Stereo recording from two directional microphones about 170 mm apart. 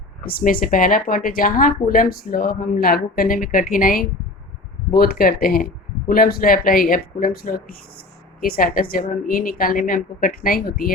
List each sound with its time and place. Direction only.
0.3 s speech: 60° left (ahead or behind)